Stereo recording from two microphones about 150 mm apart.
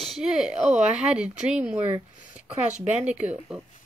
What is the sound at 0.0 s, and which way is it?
Speech, centre (ahead or behind).